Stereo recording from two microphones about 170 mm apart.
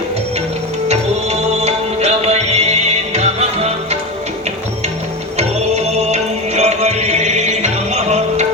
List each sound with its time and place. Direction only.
0.9 s music: 40° right (ahead or behind)
5.4 s music: 40° right (ahead or behind)